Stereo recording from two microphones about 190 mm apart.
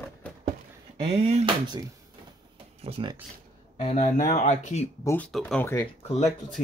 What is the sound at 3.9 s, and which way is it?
Speech, 40° left (ahead or behind).